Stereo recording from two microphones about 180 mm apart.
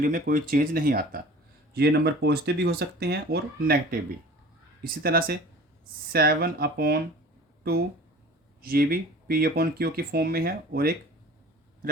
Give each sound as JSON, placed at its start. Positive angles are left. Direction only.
{"t": 0.0, "sound": "speech", "side_deg": -50}
{"t": 8.7, "sound": "speech", "side_deg": -55}